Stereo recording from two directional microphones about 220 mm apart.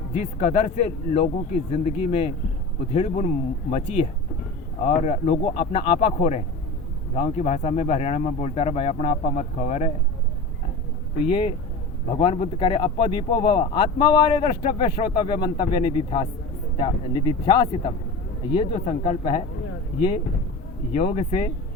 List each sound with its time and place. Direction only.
0.1 s speech: 30° left (ahead or behind)
11.3 s speech: 25° left (ahead or behind)
20.9 s speech: 30° left (ahead or behind)